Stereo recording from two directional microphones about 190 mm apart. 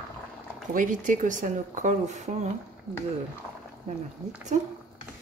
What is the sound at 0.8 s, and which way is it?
Speech, 45° right (ahead or behind).